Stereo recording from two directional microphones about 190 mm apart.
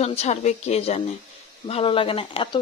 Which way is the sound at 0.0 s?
35° left (ahead or behind).